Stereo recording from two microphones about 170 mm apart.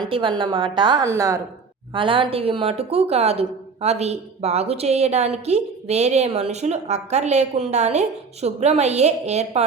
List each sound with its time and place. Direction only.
0.0 s a woman's voice: 30° right (ahead or behind)
1.9 s a woman's voice: 30° right (ahead or behind)